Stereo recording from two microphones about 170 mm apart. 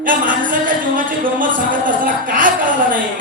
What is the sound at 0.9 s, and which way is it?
A woman's voice, 50° right (ahead or behind).